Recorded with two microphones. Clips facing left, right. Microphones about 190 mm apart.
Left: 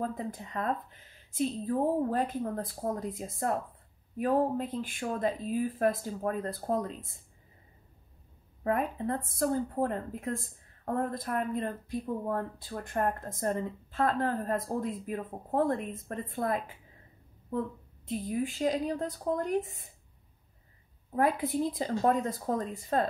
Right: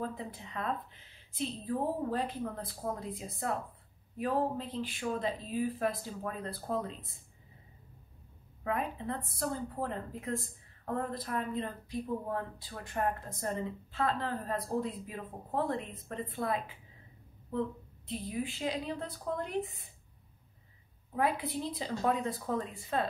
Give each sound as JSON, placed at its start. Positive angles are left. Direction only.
{"t": 0.0, "sound": "speech", "side_deg": 45}
{"t": 8.6, "sound": "speech", "side_deg": 45}
{"t": 21.1, "sound": "speech", "side_deg": 45}